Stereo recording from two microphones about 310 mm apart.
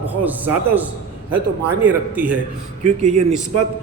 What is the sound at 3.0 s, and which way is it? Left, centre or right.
Speech, right.